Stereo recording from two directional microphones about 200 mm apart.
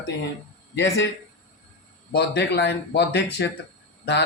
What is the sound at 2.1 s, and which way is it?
Speech, 55° left (ahead or behind).